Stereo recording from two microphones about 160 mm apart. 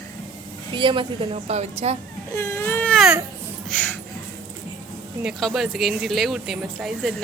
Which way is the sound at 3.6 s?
5° left (ahead or behind).